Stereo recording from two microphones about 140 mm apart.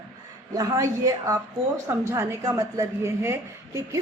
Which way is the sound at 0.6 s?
25° right (ahead or behind).